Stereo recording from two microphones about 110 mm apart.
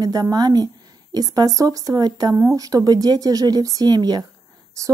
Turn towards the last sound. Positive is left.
turn(degrees=-40)  # may be behind; listen again after turning